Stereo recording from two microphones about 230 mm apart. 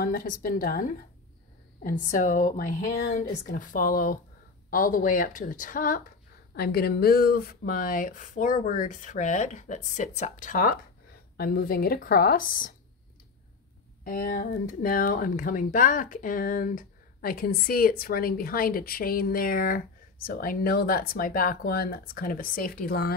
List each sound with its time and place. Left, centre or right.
0.0 s speech: left
14.0 s speech: left